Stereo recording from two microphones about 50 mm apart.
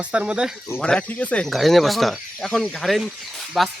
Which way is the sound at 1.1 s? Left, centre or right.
Left.